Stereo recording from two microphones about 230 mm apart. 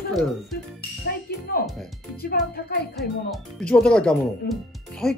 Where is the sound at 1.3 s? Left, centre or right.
Left.